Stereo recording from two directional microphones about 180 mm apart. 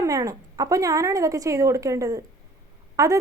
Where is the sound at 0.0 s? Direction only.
20° right (ahead or behind).